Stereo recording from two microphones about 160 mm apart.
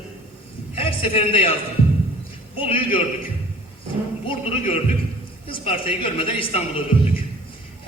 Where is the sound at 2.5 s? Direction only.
35° left (ahead or behind).